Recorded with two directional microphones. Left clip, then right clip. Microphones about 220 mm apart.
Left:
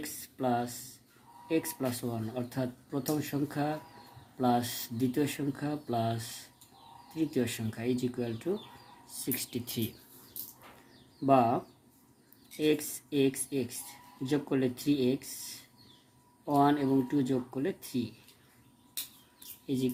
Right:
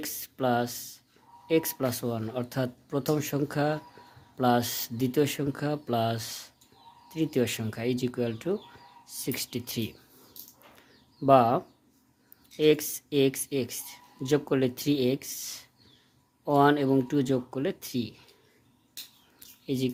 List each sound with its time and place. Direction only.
0.0 s speech: 40° right (ahead or behind)
11.3 s speech: 40° right (ahead or behind)
19.6 s speech: 40° right (ahead or behind)